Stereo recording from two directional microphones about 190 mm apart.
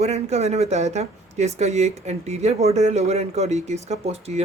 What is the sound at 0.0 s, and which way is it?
Speech, 35° right (ahead or behind).